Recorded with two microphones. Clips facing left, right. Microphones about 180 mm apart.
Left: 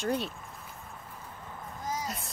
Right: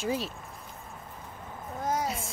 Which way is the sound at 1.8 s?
60° right (ahead or behind).